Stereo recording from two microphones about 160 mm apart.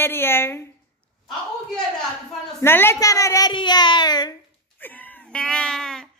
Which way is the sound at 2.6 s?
15° left (ahead or behind).